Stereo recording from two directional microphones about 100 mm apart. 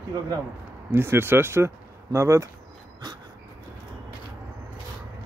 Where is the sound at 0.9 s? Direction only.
20° right (ahead or behind).